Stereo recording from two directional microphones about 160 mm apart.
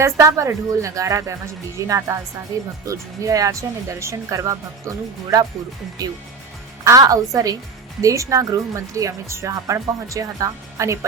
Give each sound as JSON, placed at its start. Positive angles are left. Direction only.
{"t": 0.0, "sound": "speech", "side_deg": -20}
{"t": 6.8, "sound": "speech", "side_deg": -20}